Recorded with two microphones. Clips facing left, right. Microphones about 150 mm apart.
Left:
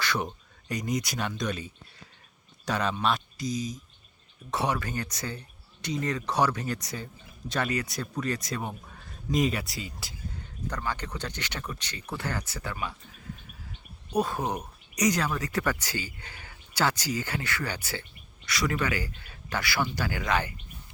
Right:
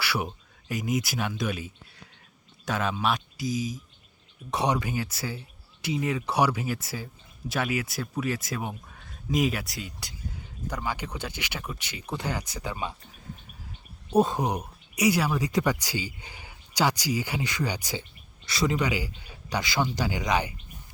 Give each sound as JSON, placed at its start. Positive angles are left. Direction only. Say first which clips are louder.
{"t": 0.0, "sound": "speech", "louder": "even", "side_deg": -10}
{"t": 4.5, "sound": "speech", "louder": "right 3 dB", "side_deg": -15}
{"t": 14.1, "sound": "speech", "louder": "right 5 dB", "side_deg": -25}
{"t": 18.4, "sound": "speech", "louder": "right 2 dB", "side_deg": -25}